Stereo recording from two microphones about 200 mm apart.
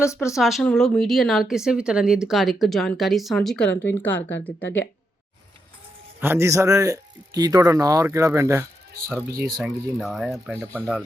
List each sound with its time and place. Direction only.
0.0 s speech: 15° left (ahead or behind)
0.3 s speech: centre (ahead or behind)
6.1 s a man's voice: 10° right (ahead or behind)
9.6 s a man's voice: centre (ahead or behind)